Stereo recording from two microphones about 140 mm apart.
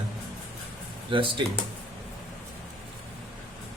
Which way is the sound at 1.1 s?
35° right (ahead or behind).